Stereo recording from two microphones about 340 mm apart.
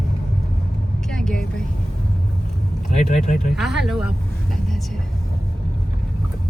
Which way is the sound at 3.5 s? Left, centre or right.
Centre.